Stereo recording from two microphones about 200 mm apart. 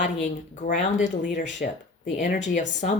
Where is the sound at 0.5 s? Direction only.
40° left (ahead or behind).